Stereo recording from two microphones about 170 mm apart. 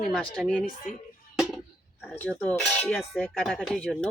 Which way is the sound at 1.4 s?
Centre (ahead or behind).